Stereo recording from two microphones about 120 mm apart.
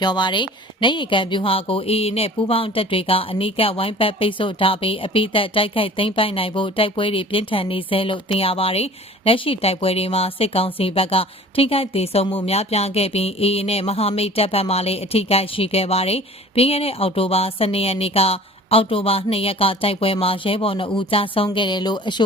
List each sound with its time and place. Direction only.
0.0 s speech: 40° left (ahead or behind)